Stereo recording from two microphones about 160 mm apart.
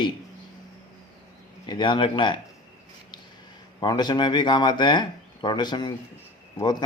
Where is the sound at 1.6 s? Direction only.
30° left (ahead or behind).